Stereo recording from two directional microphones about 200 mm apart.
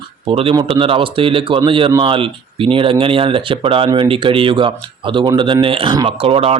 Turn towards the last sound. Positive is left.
turn(degrees=-30)  # may be behind; listen again after turning